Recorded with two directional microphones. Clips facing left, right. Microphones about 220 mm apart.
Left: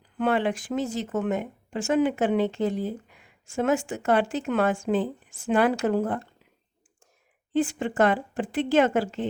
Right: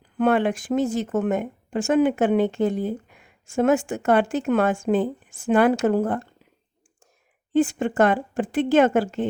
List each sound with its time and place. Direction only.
0.2 s speech: 50° right (ahead or behind)
7.5 s speech: 45° right (ahead or behind)